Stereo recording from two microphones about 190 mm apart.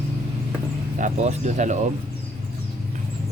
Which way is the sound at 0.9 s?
40° right (ahead or behind).